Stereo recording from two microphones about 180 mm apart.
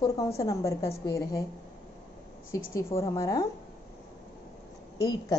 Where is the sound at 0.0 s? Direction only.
15° left (ahead or behind).